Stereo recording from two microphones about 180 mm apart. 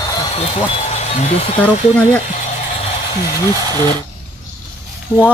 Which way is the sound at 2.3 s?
40° left (ahead or behind).